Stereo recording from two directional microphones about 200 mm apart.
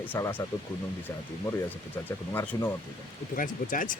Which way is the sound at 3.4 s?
45° left (ahead or behind).